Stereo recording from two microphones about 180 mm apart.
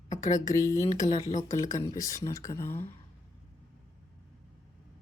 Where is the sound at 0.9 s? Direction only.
40° left (ahead or behind).